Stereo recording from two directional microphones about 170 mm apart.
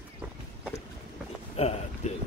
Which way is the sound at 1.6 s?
40° left (ahead or behind).